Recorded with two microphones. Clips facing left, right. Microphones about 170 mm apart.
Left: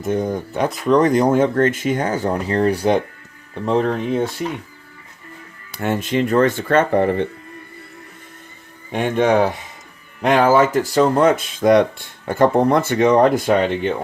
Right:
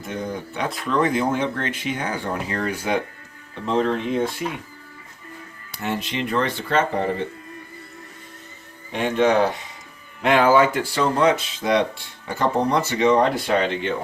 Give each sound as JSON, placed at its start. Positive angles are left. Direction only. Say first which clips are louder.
{"t": 0.0, "sound": "speech", "louder": "left 8 dB", "side_deg": 45}
{"t": 5.8, "sound": "speech", "louder": "left 7 dB", "side_deg": 50}
{"t": 8.9, "sound": "speech", "louder": "left 2 dB", "side_deg": 50}
{"t": 10.2, "sound": "speech", "louder": "left 2 dB", "side_deg": 40}